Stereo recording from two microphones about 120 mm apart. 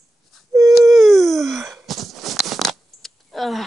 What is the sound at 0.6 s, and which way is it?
Dog, centre (ahead or behind).